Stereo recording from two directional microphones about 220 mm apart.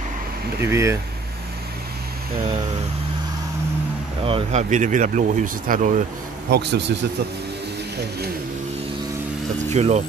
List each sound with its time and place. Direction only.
0.6 s speech: 10° right (ahead or behind)
4.2 s speech: 25° right (ahead or behind)
6.5 s speech: 50° right (ahead or behind)
9.7 s speech: 30° right (ahead or behind)